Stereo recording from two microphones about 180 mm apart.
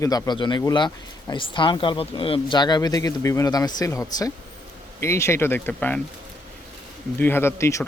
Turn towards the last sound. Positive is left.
turn(degrees=15)  # may be behind; listen again after turning